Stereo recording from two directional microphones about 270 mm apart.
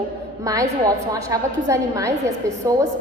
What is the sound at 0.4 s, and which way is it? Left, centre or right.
A woman's voice, centre.